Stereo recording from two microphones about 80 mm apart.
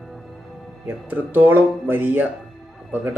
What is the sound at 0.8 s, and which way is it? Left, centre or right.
Speech, right.